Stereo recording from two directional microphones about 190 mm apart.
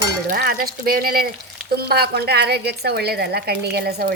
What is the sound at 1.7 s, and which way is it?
A woman's voice, 55° right (ahead or behind).